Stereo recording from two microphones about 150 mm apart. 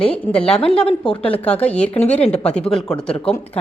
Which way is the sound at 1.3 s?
10° left (ahead or behind).